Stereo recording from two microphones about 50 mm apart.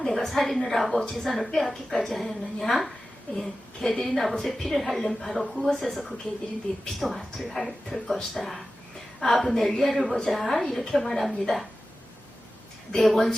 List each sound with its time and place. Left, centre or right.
0.0 s a woman's voice: centre
6.7 s speech: left
7.3 s a woman's voice: centre
13.0 s a woman's voice: centre